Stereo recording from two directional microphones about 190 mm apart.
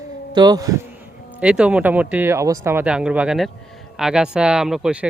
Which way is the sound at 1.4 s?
5° right (ahead or behind).